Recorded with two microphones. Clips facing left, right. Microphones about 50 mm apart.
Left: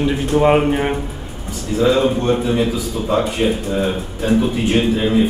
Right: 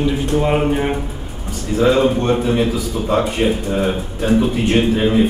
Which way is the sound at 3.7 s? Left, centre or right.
Centre.